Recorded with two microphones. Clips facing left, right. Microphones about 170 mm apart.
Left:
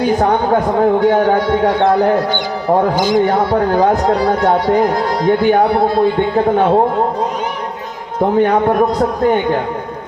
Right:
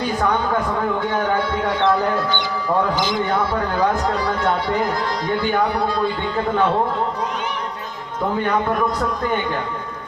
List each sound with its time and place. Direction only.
0.2 s a man's voice: 40° left (ahead or behind)
8.6 s a man's voice: 50° left (ahead or behind)